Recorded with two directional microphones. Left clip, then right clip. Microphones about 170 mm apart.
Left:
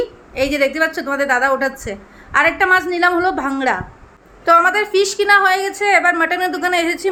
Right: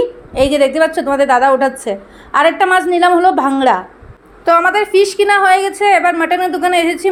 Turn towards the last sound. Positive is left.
turn(degrees=-10)  # may be behind; listen again after turning